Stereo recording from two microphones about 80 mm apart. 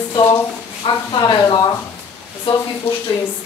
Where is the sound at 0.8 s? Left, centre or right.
Left.